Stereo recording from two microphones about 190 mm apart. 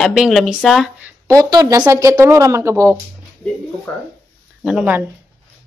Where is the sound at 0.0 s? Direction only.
Centre (ahead or behind).